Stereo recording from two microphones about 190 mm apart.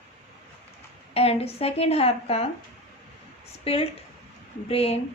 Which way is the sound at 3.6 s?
30° left (ahead or behind).